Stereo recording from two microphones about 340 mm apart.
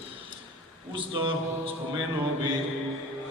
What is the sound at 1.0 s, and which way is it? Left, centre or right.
Speech, centre.